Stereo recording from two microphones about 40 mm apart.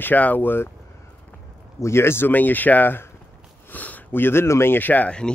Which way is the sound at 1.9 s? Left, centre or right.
Left.